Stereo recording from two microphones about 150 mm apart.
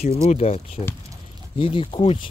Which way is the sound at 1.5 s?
35° left (ahead or behind).